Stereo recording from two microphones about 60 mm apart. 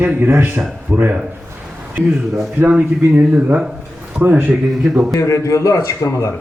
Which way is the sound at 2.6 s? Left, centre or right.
Right.